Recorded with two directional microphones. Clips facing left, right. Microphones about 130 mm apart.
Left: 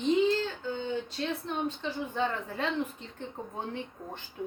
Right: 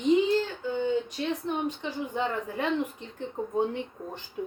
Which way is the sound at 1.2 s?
15° right (ahead or behind).